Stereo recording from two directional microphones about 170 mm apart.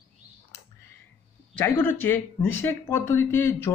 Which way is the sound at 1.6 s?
10° left (ahead or behind).